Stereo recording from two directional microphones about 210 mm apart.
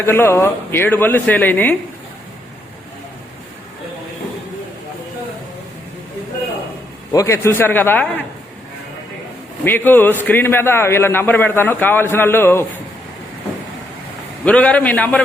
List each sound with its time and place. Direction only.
0.0 s a man's voice: 10° left (ahead or behind)
7.1 s a man's voice: 15° left (ahead or behind)
9.6 s a man's voice: 10° left (ahead or behind)
14.4 s a man's voice: 5° left (ahead or behind)